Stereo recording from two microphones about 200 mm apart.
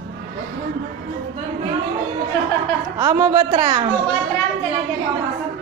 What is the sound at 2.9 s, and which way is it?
Speech, 15° right (ahead or behind).